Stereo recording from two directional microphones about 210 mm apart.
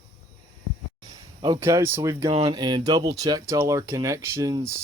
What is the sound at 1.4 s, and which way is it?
Speech, 20° right (ahead or behind).